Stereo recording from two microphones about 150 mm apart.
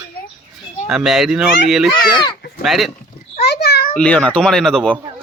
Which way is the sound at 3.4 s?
90° left.